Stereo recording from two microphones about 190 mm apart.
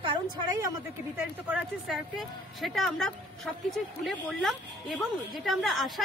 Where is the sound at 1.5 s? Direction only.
Centre (ahead or behind).